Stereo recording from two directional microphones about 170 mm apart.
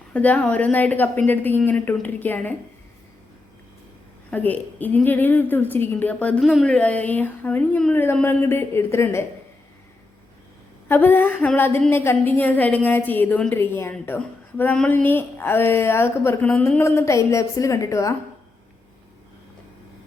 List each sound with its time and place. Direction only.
0.1 s a woman's voice: 10° left (ahead or behind)
4.3 s a woman's voice: 10° left (ahead or behind)
10.8 s a woman's voice: 10° left (ahead or behind)